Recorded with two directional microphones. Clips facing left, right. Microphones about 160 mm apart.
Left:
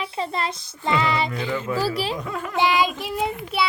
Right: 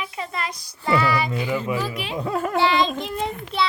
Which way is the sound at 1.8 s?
35° left (ahead or behind).